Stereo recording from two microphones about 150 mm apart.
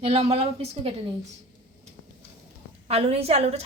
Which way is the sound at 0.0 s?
40° right (ahead or behind).